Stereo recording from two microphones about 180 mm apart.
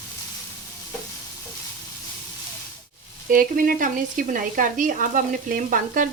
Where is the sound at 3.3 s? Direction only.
50° right (ahead or behind).